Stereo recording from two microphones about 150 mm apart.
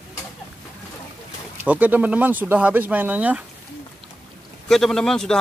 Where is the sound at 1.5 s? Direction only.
10° right (ahead or behind).